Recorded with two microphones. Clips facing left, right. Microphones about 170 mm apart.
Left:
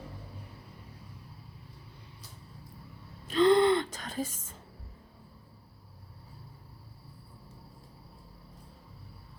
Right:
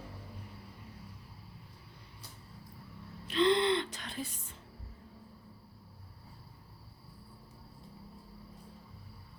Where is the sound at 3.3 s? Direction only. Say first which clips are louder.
Left 5 dB; 45° left (ahead or behind).